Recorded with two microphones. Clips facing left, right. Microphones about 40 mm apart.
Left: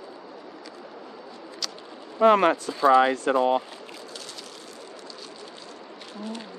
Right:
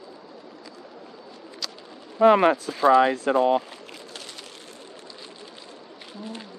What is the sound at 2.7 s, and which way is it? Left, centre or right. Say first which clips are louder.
Speech: even; right.